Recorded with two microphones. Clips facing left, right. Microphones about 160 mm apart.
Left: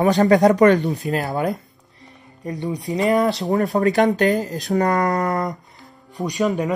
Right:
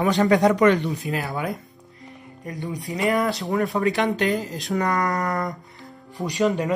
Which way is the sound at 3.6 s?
40° left (ahead or behind).